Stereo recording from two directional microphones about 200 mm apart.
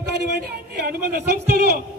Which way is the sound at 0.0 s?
55° right (ahead or behind).